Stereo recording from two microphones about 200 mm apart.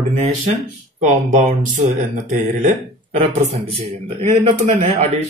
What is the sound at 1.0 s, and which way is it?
Speech, 35° right (ahead or behind).